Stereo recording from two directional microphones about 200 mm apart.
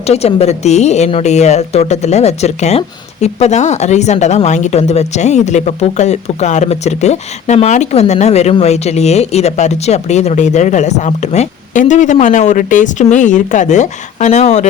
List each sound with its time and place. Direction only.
0.0 s a woman's voice: 30° left (ahead or behind)